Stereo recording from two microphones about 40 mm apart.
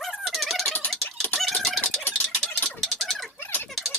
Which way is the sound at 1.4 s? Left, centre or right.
Centre.